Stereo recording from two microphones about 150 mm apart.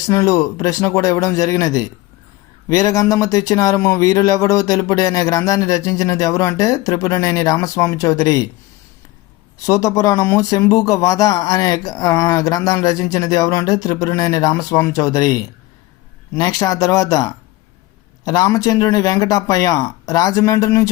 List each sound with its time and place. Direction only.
0.1 s speech: 20° left (ahead or behind)
9.6 s speech: 20° left (ahead or behind)